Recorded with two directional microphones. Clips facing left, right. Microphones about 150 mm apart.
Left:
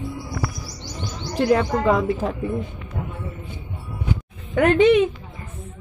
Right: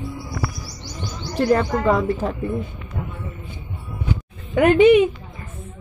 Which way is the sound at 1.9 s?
Centre (ahead or behind).